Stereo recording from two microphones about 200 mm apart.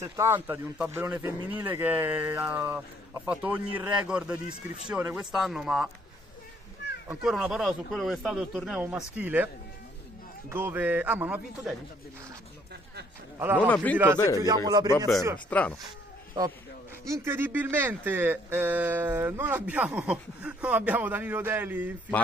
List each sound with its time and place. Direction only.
0.0 s speech: 15° right (ahead or behind)
7.1 s speech: centre (ahead or behind)
10.5 s speech: 10° right (ahead or behind)
13.6 s a man's voice: 10° left (ahead or behind)
14.4 s a man's voice: 20° right (ahead or behind)
15.5 s speech: 5° left (ahead or behind)
16.4 s a man's voice: 20° right (ahead or behind)